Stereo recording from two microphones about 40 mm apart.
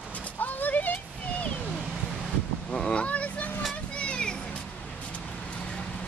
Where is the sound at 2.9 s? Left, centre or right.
Left.